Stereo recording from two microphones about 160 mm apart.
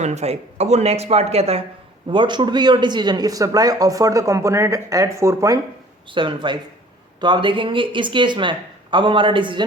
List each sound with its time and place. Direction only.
0.0 s speech: 45° right (ahead or behind)
2.0 s speech: 30° right (ahead or behind)
6.1 s speech: 30° right (ahead or behind)